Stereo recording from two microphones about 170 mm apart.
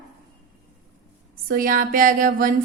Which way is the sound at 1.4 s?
55° right (ahead or behind).